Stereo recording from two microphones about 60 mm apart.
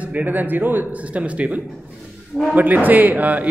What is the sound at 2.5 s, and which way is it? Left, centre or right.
Speech, right.